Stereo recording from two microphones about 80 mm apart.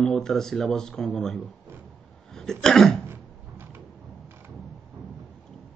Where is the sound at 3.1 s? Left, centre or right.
Right.